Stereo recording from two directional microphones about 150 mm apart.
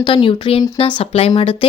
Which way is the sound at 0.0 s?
35° left (ahead or behind).